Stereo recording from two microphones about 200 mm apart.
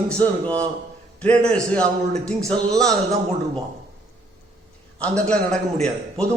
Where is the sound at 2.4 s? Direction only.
20° right (ahead or behind).